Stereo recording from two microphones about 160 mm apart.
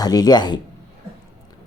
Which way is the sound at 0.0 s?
25° left (ahead or behind).